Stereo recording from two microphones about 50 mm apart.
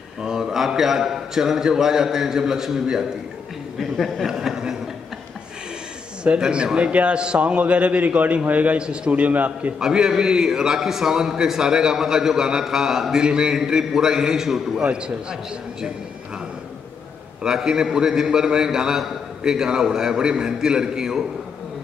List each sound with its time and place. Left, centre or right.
0.2 s a man's voice: centre
3.9 s speech: centre
4.3 s speech: centre
6.4 s a man's voice: centre
9.8 s a man's voice: centre
17.4 s a man's voice: centre